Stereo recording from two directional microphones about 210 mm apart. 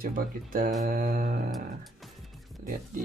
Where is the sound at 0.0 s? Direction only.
40° right (ahead or behind).